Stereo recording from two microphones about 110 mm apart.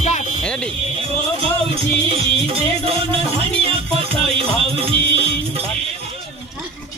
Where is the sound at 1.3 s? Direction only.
60° right (ahead or behind).